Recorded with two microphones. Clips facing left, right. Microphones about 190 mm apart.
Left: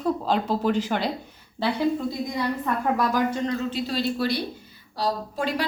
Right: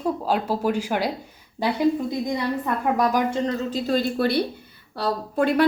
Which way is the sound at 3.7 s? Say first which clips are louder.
Right 3 dB; 45° right (ahead or behind).